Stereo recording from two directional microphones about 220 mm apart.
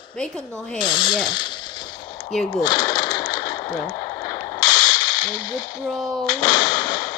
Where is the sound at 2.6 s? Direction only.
20° left (ahead or behind).